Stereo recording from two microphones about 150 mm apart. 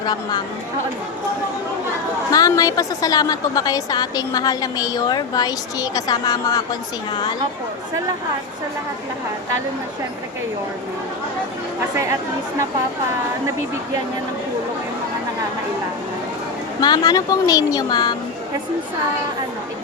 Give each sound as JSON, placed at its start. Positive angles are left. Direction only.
{"t": 0.0, "sound": "a woman's voice", "side_deg": 25}
{"t": 2.3, "sound": "a woman's voice", "side_deg": 25}
{"t": 16.8, "sound": "a woman's voice", "side_deg": 25}